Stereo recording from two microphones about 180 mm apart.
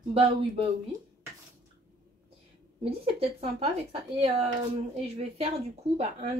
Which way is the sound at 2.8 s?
35° right (ahead or behind).